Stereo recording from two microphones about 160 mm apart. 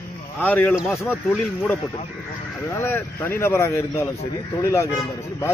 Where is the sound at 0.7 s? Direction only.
Centre (ahead or behind).